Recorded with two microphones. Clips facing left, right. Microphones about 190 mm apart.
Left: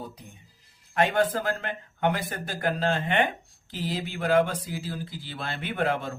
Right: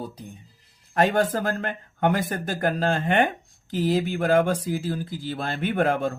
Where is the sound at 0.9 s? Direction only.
40° right (ahead or behind).